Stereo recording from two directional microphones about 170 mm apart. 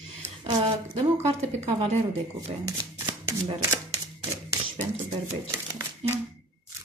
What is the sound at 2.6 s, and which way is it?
Shuffling cards, 20° right (ahead or behind).